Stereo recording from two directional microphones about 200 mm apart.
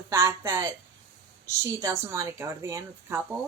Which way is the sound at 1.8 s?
15° right (ahead or behind).